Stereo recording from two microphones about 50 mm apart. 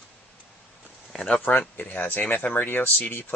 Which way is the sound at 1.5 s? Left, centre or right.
Left.